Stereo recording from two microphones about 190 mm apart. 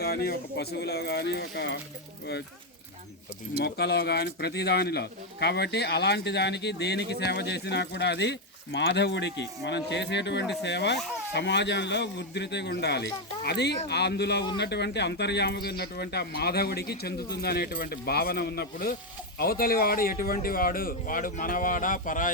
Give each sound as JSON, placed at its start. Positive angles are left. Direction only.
{"t": 0.0, "sound": "speech", "side_deg": 55}
{"t": 3.6, "sound": "speech", "side_deg": 60}